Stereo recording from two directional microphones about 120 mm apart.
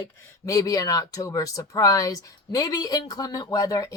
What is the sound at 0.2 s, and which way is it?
Speech, 30° left (ahead or behind).